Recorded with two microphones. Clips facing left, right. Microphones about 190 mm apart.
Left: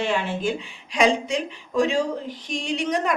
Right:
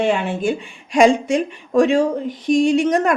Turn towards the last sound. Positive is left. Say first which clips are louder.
# right 9 dB
turn(degrees=-50)  # may be behind; listen again after turning